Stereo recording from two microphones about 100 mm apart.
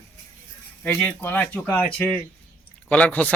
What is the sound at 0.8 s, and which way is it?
Speech, 15° left (ahead or behind).